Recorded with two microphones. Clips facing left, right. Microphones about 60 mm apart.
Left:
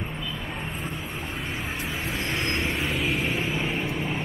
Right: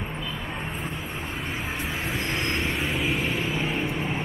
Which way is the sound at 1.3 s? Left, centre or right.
Centre.